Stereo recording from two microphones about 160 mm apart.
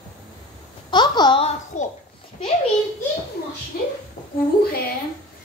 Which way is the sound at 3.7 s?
70° left (ahead or behind).